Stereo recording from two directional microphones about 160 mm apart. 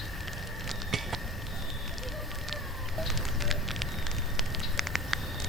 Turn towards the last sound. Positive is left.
turn(degrees=0)  # may be behind; listen again after turning